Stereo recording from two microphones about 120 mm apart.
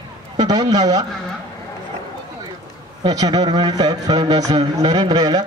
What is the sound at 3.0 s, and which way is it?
Speech, 35° right (ahead or behind).